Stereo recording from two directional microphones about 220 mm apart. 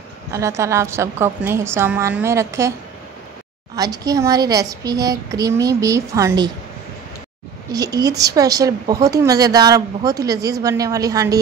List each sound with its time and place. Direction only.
0.3 s speech: 15° right (ahead or behind)
3.7 s speech: 15° right (ahead or behind)
7.7 s speech: 15° right (ahead or behind)